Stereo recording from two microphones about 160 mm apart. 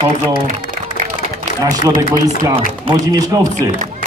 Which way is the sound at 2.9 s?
25° right (ahead or behind).